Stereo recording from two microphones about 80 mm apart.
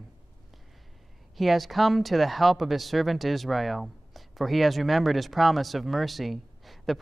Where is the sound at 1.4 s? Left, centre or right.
Centre.